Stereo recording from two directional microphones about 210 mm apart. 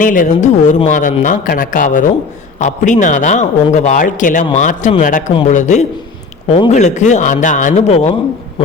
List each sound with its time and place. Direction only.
0.0 s speech: 40° left (ahead or behind)